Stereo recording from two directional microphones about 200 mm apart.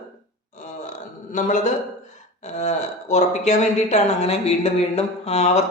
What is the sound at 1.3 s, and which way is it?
Speech, 40° left (ahead or behind).